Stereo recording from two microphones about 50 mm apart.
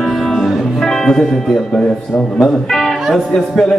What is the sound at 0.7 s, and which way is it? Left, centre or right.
Speech, centre.